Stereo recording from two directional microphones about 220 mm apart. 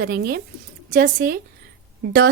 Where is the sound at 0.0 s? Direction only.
45° right (ahead or behind).